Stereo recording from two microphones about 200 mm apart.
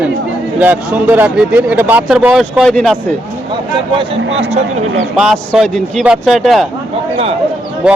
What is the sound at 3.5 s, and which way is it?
Speech, 25° right (ahead or behind).